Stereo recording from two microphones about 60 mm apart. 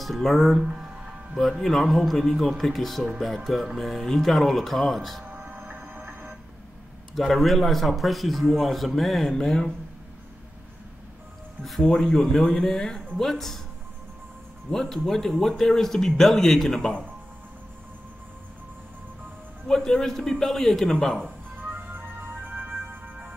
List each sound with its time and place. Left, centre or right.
0.0 s a man's voice: centre
5.2 s music: right
7.2 s a man's voice: centre
11.9 s a man's voice: centre
14.7 s speech: centre
19.7 s speech: centre
21.9 s music: right